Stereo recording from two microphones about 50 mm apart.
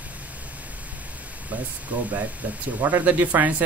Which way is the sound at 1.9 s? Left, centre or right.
Right.